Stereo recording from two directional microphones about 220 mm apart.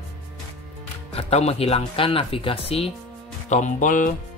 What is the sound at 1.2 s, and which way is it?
Speech, 30° left (ahead or behind).